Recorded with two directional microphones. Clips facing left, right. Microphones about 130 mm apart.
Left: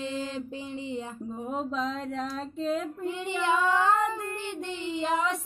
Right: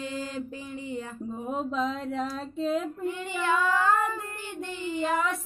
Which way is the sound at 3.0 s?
20° left (ahead or behind).